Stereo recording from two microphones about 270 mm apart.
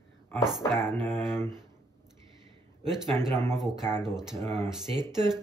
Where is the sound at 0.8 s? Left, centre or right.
Centre.